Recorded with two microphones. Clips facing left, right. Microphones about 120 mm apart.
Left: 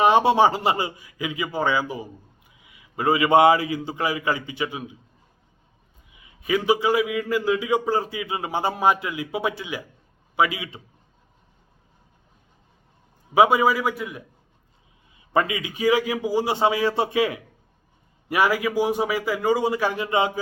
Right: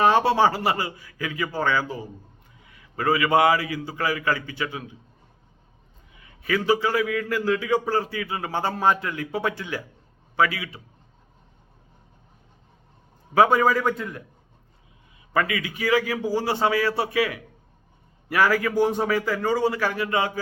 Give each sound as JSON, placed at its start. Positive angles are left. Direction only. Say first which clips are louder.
{"t": 0.0, "sound": "a man's voice", "louder": "left 2 dB", "side_deg": 15}
{"t": 6.1, "sound": "a man's voice", "louder": "left 2 dB", "side_deg": 15}
{"t": 13.3, "sound": "a man's voice", "louder": "left 1 dB", "side_deg": 15}
{"t": 15.3, "sound": "a man's voice", "louder": "left 2 dB", "side_deg": 20}